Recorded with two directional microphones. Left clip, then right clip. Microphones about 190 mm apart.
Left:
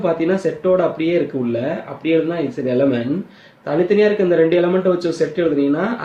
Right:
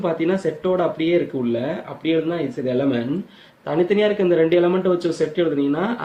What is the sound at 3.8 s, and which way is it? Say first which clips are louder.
Speech: left 4 dB; 40° right (ahead or behind).